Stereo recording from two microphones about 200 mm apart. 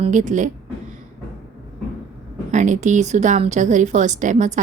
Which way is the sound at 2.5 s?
35° right (ahead or behind).